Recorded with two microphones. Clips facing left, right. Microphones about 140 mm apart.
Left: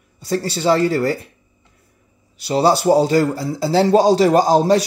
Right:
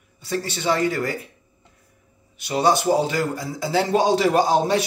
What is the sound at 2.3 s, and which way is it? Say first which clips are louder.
A man's voice: left 4 dB; 35° left (ahead or behind).